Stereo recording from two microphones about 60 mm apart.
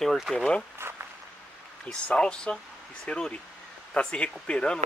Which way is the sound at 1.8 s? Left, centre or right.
Centre.